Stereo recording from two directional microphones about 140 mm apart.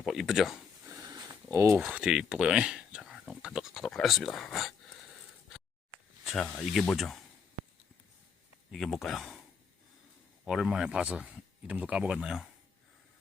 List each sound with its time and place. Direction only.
0.0 s a sound: centre (ahead or behind)
1.3 s a sound: 20° right (ahead or behind)
1.8 s speech: 5° right (ahead or behind)
6.2 s a man's voice: centre (ahead or behind)
8.7 s a man's voice: centre (ahead or behind)
10.4 s a man's voice: centre (ahead or behind)